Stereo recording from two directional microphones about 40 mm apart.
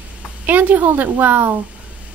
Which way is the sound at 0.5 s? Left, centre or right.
Right.